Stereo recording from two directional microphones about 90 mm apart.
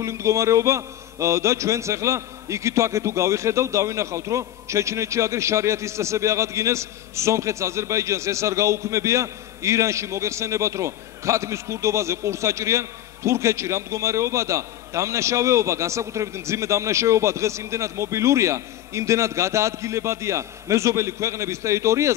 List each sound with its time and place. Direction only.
0.0 s a man's voice: 35° right (ahead or behind)